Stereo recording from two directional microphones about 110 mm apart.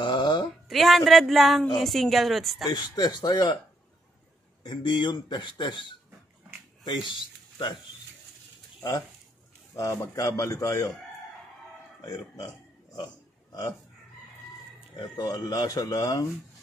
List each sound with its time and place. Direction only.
0.0 s a sound: 45° left (ahead or behind)
0.7 s speech: centre (ahead or behind)
2.7 s speech: 40° left (ahead or behind)
4.6 s speech: 45° left (ahead or behind)
9.8 s a man's voice: 30° left (ahead or behind)
12.0 s speech: 35° left (ahead or behind)
12.9 s a sound: 35° left (ahead or behind)
15.0 s speech: 40° left (ahead or behind)